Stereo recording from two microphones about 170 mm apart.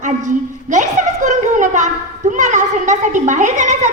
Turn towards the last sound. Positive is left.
turn(degrees=-45)  # may be behind; listen again after turning